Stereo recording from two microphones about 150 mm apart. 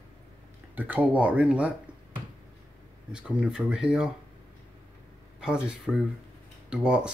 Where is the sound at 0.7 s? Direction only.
10° right (ahead or behind).